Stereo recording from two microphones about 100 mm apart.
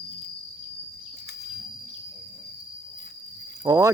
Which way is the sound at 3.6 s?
40° right (ahead or behind).